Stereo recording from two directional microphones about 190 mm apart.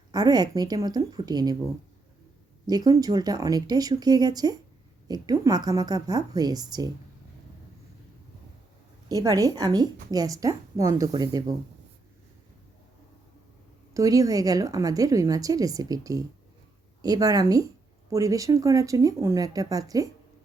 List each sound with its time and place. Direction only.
0.1 s a woman's voice: 20° right (ahead or behind)
2.6 s a woman's voice: 20° right (ahead or behind)
9.0 s a woman's voice: 20° right (ahead or behind)
13.9 s a woman's voice: 15° right (ahead or behind)